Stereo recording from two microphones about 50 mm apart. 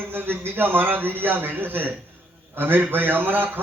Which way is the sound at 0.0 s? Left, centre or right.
Right.